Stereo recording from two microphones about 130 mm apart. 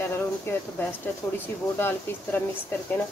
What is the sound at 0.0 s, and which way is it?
Speech, 15° left (ahead or behind).